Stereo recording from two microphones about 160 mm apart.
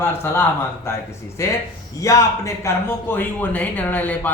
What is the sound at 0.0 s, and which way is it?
A man's voice, 15° left (ahead or behind).